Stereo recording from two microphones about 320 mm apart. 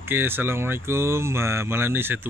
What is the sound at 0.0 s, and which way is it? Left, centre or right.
Speech, centre.